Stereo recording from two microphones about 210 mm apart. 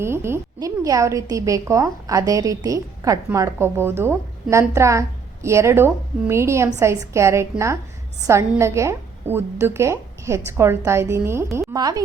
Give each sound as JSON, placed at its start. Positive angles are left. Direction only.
{"t": 0.0, "sound": "a woman's voice", "side_deg": -10}